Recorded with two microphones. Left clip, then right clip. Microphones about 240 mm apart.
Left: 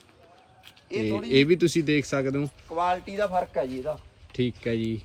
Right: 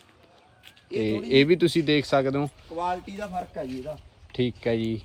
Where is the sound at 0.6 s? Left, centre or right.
Centre.